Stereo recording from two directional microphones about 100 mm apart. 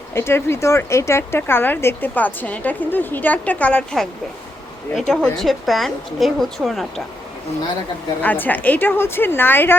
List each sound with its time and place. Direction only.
0.1 s speech: 25° left (ahead or behind)
4.9 s a woman's voice: 5° left (ahead or behind)
8.2 s speech: 15° left (ahead or behind)